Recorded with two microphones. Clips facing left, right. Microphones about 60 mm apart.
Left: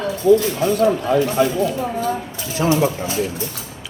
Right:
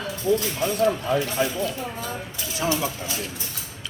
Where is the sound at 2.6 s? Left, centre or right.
Left.